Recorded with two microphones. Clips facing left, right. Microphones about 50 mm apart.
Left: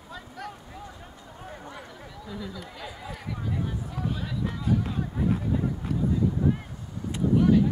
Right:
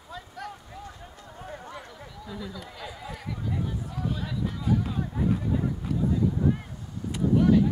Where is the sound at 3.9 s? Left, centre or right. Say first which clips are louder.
Even; centre.